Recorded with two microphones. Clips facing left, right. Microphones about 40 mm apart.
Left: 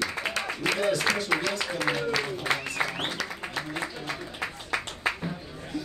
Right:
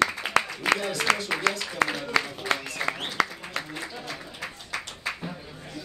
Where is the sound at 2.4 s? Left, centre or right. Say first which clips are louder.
Even; left.